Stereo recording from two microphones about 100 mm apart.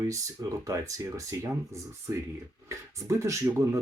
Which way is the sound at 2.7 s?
30° right (ahead or behind).